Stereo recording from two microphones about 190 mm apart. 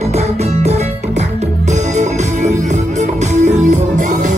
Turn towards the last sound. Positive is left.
turn(degrees=-40)  # may be behind; listen again after turning